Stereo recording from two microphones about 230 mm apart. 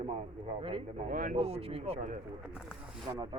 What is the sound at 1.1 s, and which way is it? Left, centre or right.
Speech, right.